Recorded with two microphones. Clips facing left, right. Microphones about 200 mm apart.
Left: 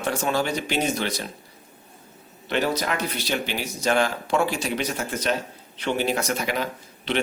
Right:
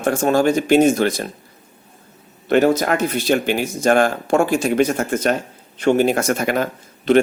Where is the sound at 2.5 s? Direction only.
50° right (ahead or behind).